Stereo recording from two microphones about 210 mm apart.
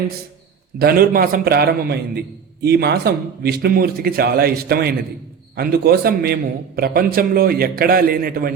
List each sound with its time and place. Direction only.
0.8 s a man's voice: 45° right (ahead or behind)